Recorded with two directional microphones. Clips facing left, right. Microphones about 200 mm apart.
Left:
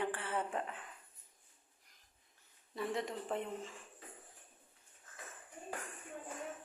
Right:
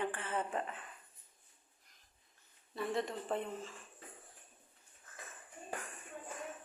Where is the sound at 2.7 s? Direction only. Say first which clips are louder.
Right 1 dB; 15° left (ahead or behind).